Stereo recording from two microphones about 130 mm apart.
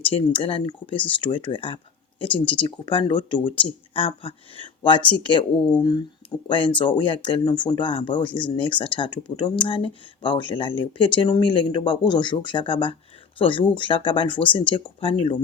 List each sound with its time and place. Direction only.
0.1 s speech: 45° left (ahead or behind)